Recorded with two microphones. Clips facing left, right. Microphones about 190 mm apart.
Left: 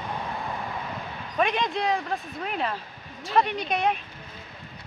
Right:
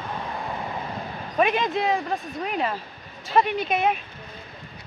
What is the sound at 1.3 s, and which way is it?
Speech, 5° right (ahead or behind).